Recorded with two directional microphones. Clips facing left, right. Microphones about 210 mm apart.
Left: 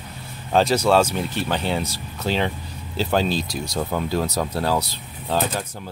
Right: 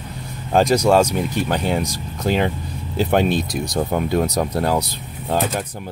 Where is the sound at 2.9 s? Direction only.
60° right (ahead or behind).